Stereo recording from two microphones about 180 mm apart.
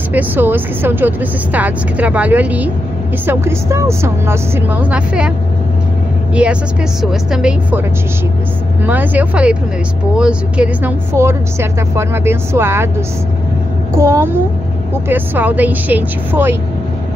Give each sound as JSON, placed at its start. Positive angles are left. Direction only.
{"t": 0.1, "sound": "speech", "side_deg": -10}
{"t": 6.3, "sound": "speech", "side_deg": -5}
{"t": 8.8, "sound": "speech", "side_deg": -10}
{"t": 13.9, "sound": "speech", "side_deg": -15}